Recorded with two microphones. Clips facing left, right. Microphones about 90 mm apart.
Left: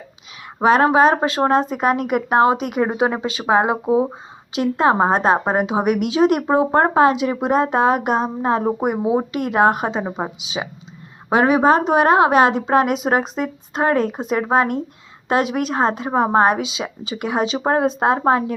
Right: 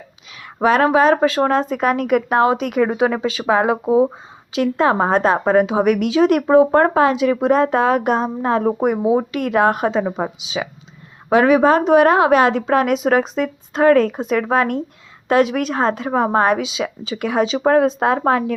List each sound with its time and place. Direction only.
0.6 s a woman's voice: 25° left (ahead or behind)